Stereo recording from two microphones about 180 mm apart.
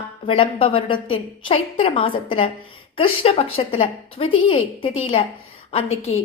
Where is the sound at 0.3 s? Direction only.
30° left (ahead or behind).